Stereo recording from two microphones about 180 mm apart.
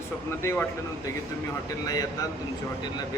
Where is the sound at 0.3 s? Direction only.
10° left (ahead or behind).